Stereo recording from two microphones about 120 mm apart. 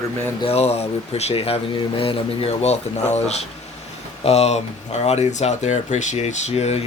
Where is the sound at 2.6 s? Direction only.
65° left (ahead or behind).